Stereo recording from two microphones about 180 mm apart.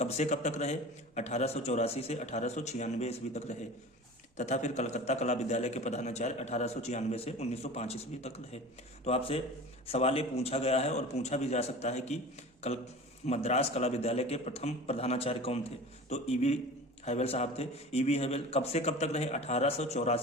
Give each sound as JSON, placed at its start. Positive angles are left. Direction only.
{"t": 0.0, "sound": "a man's voice", "side_deg": 40}